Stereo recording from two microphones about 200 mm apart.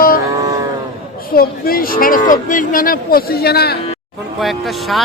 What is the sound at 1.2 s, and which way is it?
Speech, 50° left (ahead or behind).